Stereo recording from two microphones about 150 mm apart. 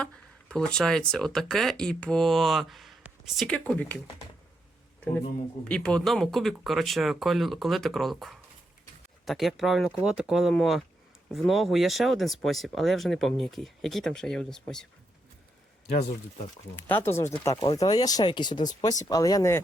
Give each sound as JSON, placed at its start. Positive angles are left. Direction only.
{"t": 0.0, "sound": "speech", "side_deg": 5}
{"t": 5.6, "sound": "speech", "side_deg": 5}
{"t": 16.8, "sound": "speech", "side_deg": 15}